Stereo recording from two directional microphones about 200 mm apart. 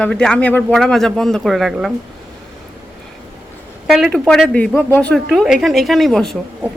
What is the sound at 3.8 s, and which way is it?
A woman's voice, centre (ahead or behind).